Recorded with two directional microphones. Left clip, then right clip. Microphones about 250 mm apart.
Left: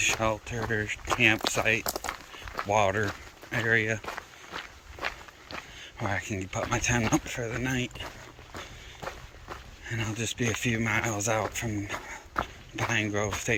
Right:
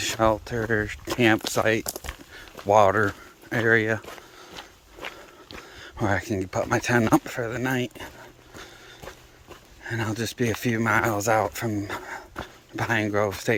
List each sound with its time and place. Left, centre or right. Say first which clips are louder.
0.0 s speech: right 4 dB; right
1.8 s speech: left 2 dB; centre
2.6 s speech: right 8 dB; right
5.8 s speech: right 7 dB; right
9.8 s speech: right 5 dB; centre